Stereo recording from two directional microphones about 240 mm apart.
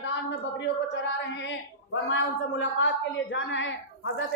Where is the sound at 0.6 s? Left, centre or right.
Left.